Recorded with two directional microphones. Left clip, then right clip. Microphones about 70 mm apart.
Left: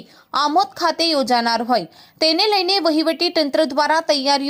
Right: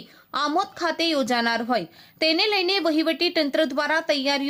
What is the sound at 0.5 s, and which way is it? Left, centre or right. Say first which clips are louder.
A woman's voice: left 7 dB; left.